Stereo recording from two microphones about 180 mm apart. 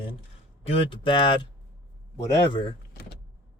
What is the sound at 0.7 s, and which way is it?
Speech, 30° left (ahead or behind).